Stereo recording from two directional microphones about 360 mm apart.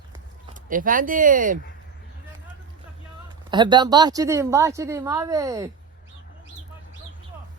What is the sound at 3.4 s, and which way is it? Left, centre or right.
A woman's voice, centre.